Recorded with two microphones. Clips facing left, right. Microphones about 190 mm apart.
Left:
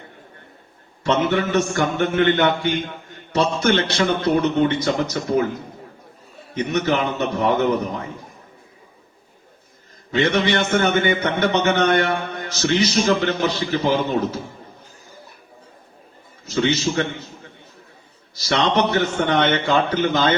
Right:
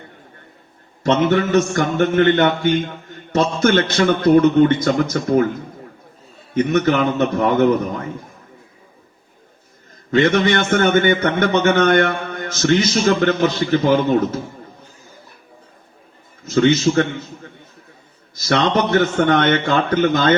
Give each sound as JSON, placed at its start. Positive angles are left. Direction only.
{"t": 1.0, "sound": "a man's voice", "side_deg": -45}
{"t": 6.5, "sound": "a man's voice", "side_deg": -50}
{"t": 10.1, "sound": "a man's voice", "side_deg": -50}
{"t": 16.6, "sound": "a man's voice", "side_deg": -50}
{"t": 18.3, "sound": "a man's voice", "side_deg": -50}